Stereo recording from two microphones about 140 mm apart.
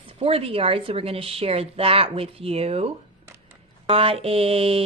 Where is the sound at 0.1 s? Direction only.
45° right (ahead or behind).